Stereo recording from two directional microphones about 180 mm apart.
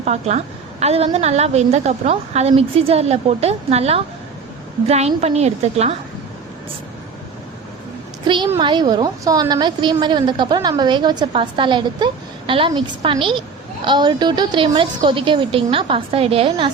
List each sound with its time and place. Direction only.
0.0 s a woman's voice: 40° right (ahead or behind)
8.3 s a woman's voice: 25° right (ahead or behind)